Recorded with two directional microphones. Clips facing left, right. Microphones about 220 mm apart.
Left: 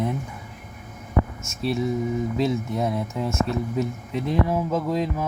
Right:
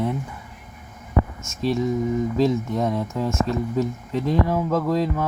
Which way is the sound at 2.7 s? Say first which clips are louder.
Right 2 dB; 10° left (ahead or behind).